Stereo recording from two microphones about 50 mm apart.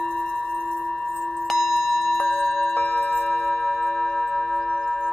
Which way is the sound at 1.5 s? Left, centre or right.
Centre.